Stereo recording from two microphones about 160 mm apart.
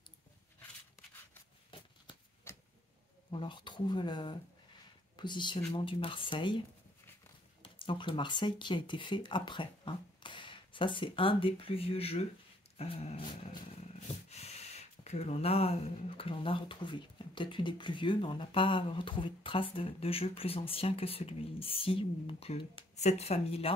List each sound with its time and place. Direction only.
2.5 s tick-tock: 15° left (ahead or behind)
3.3 s speech: 30° left (ahead or behind)
5.7 s dog: 35° left (ahead or behind)
7.6 s speech: 30° left (ahead or behind)
12.7 s dog: 40° left (ahead or behind)